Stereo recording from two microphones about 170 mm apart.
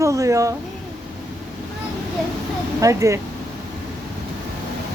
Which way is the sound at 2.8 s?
20° right (ahead or behind).